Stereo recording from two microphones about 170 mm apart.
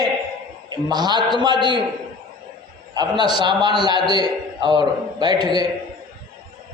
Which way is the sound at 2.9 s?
25° right (ahead or behind).